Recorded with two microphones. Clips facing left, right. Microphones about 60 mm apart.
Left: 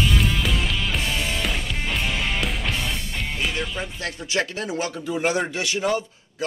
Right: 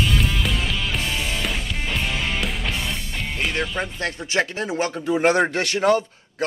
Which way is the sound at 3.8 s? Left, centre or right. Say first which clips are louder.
Right 4 dB; right.